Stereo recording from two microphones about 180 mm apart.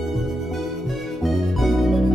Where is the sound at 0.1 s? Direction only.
Centre (ahead or behind).